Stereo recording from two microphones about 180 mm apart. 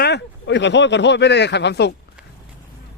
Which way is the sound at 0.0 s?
70° left (ahead or behind).